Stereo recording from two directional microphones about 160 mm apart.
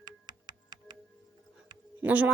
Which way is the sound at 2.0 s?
10° right (ahead or behind).